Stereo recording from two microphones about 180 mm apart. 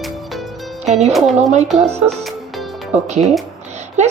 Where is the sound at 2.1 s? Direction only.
Centre (ahead or behind).